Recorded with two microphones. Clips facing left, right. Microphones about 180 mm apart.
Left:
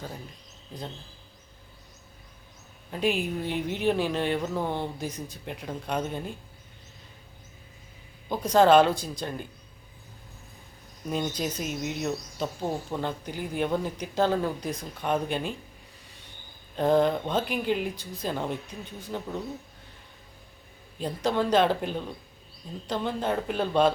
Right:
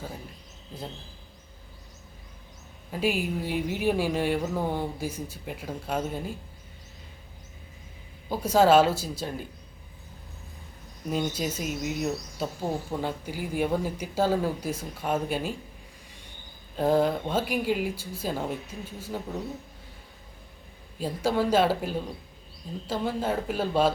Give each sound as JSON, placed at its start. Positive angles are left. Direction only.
{"t": 2.9, "sound": "speech", "side_deg": -5}
{"t": 8.3, "sound": "speech", "side_deg": -5}
{"t": 11.1, "sound": "speech", "side_deg": -5}
{"t": 16.7, "sound": "speech", "side_deg": -5}
{"t": 21.0, "sound": "speech", "side_deg": -10}